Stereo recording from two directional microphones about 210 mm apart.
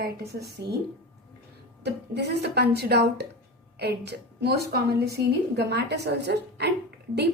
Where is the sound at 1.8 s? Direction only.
50° right (ahead or behind).